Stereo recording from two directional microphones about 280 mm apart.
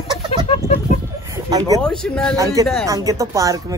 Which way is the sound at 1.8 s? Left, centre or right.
Centre.